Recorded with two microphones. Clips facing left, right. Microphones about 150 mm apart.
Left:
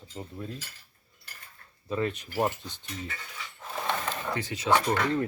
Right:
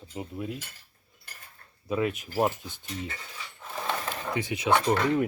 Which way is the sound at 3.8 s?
5° right (ahead or behind).